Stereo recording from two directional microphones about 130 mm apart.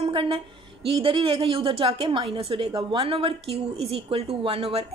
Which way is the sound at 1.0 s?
40° right (ahead or behind).